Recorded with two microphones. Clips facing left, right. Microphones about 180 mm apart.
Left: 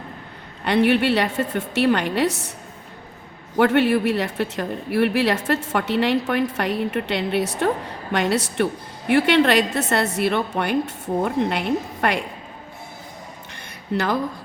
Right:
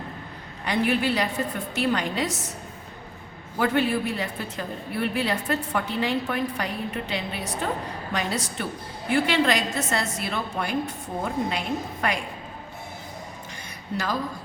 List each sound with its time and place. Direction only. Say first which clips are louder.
0.6 s a woman's voice: left 6 dB; 65° left (ahead or behind)
3.6 s a woman's voice: left 6 dB; 70° left (ahead or behind)
13.9 s speech: left 6 dB; 65° left (ahead or behind)